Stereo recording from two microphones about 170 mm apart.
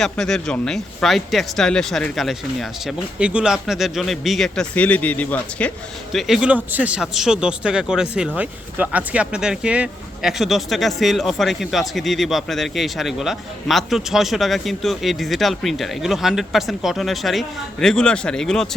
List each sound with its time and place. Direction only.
0.0 s speech: 5° left (ahead or behind)